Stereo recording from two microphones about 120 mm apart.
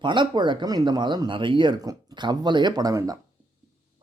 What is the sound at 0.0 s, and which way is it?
Speech, 40° right (ahead or behind).